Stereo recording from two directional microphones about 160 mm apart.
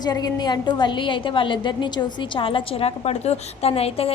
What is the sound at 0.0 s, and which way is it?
A woman's voice, 25° left (ahead or behind).